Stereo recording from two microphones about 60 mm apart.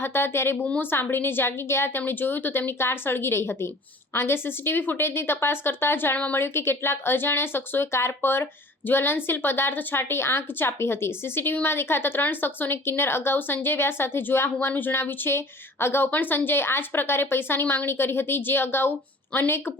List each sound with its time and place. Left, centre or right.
0.0 s a woman's voice: left
0.5 s a woman's voice: left
0.8 s a woman's voice: left
16.0 s a woman's voice: left